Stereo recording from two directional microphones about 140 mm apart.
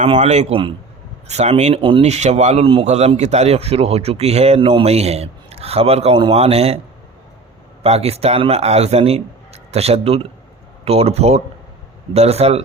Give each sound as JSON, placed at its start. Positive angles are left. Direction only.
{"t": 0.0, "sound": "a man's voice", "side_deg": -50}
{"t": 7.8, "sound": "a man's voice", "side_deg": -45}